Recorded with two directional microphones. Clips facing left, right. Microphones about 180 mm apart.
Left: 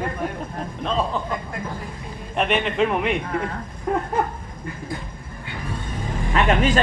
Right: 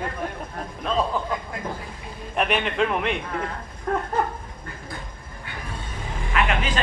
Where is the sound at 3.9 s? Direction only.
10° left (ahead or behind).